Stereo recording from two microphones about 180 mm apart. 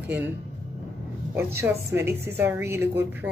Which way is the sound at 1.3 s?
15° right (ahead or behind).